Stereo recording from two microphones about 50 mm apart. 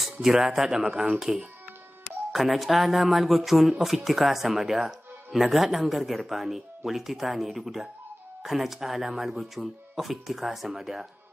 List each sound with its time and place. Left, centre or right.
0.0 s speech: centre